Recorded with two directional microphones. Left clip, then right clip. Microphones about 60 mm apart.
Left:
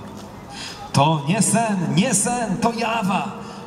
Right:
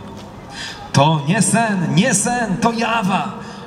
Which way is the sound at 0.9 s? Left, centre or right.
Right.